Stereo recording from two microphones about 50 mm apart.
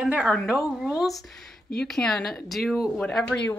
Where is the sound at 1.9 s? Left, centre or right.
Centre.